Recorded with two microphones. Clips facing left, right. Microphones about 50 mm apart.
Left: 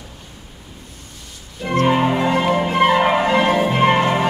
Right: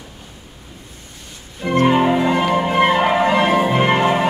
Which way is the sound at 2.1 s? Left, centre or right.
Centre.